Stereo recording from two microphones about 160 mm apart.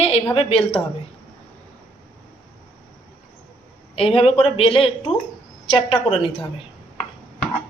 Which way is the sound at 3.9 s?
40° left (ahead or behind).